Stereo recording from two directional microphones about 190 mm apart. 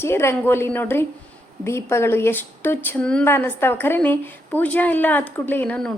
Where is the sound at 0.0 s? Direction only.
15° left (ahead or behind).